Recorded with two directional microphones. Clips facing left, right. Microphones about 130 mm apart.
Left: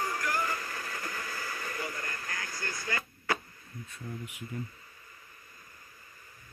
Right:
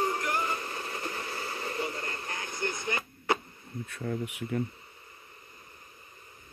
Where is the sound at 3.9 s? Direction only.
70° right (ahead or behind).